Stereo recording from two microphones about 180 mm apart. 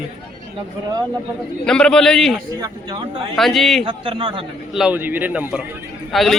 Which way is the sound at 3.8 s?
30° right (ahead or behind).